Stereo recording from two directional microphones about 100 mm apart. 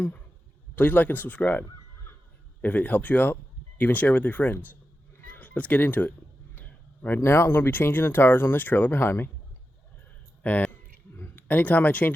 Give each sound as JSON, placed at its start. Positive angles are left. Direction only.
{"t": 0.8, "sound": "speech", "side_deg": 15}
{"t": 6.6, "sound": "a sound", "side_deg": 15}
{"t": 7.2, "sound": "speech", "side_deg": 25}
{"t": 10.4, "sound": "speech", "side_deg": 15}